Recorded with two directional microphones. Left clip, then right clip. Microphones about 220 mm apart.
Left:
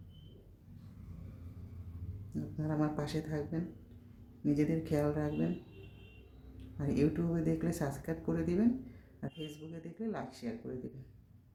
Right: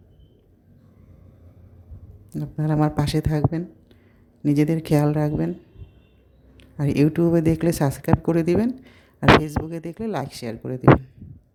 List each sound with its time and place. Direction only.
2.6 s speech: 45° right (ahead or behind)
6.7 s speech: 45° right (ahead or behind)